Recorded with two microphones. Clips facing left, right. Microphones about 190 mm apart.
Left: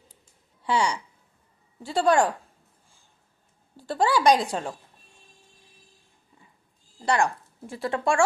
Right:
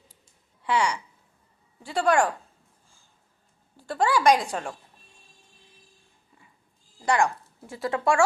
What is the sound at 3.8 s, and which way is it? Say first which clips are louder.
Speech: left 1 dB; 30° left (ahead or behind).